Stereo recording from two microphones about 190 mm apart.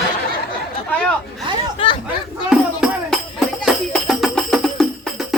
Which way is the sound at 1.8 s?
30° left (ahead or behind).